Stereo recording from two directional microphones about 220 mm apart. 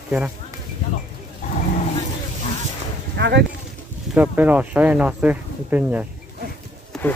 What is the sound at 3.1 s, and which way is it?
Speech, 50° right (ahead or behind).